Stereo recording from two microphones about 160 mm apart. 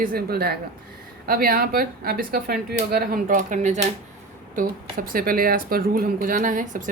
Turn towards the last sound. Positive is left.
turn(degrees=-55)  # may be behind; listen again after turning